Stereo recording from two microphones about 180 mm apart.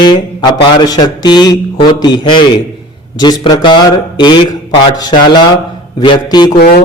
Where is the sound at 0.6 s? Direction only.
20° left (ahead or behind).